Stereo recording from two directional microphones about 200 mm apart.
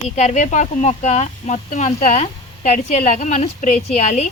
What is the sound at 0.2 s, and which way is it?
A woman's voice, 35° left (ahead or behind).